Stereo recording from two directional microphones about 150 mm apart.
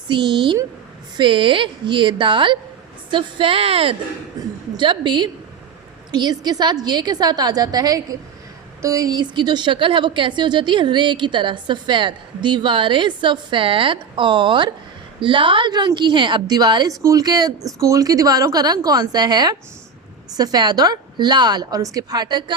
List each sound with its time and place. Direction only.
0.1 s speech: 30° right (ahead or behind)
4.4 s a woman's voice: 25° right (ahead or behind)